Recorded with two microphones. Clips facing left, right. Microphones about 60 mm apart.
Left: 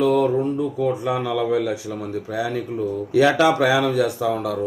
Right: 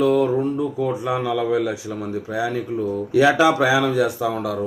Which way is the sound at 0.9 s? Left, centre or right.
Centre.